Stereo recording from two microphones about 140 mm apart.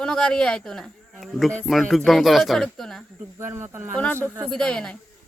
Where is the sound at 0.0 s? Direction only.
5° left (ahead or behind).